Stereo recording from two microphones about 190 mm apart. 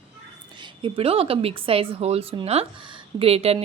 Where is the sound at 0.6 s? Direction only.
25° right (ahead or behind).